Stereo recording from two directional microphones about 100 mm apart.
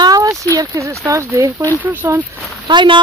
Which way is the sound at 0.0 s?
40° right (ahead or behind).